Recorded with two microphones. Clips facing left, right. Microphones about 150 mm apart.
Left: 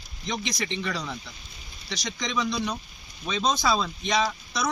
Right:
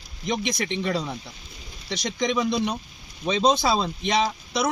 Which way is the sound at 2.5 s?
25° right (ahead or behind).